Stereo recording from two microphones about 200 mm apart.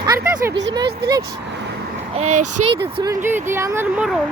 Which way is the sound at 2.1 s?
35° right (ahead or behind).